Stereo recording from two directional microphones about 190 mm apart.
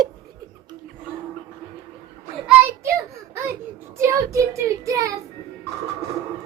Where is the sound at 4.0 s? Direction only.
15° right (ahead or behind).